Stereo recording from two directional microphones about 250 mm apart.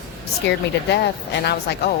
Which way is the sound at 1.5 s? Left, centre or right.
Left.